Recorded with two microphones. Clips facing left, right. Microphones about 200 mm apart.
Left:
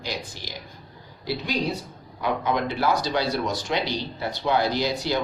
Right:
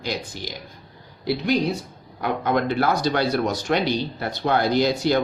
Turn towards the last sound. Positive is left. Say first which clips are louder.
# right 5 dB
turn(degrees=-55)  # may be behind; listen again after turning